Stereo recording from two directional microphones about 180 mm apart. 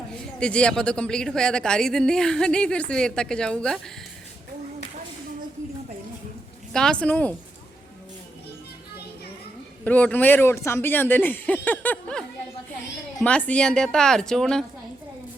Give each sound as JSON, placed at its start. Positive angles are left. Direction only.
{"t": 0.3, "sound": "speech", "side_deg": 5}
{"t": 6.7, "sound": "speech", "side_deg": 5}
{"t": 9.8, "sound": "a woman's voice", "side_deg": 10}